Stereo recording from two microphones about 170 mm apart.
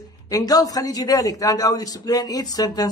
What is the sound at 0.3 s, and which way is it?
Speech, 20° left (ahead or behind).